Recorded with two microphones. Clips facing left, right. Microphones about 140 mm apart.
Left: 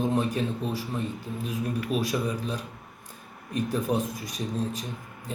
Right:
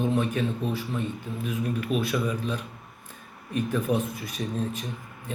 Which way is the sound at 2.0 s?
35° left (ahead or behind).